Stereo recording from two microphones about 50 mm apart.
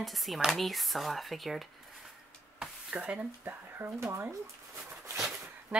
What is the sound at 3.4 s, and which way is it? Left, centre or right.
Speech, right.